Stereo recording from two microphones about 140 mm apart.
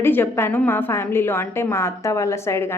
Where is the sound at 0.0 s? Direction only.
15° left (ahead or behind).